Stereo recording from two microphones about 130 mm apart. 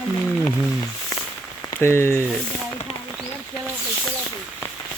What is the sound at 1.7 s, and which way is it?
Speech, 20° left (ahead or behind).